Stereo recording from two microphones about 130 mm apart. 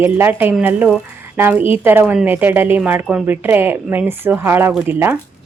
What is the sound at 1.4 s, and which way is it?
A woman's voice, 15° right (ahead or behind).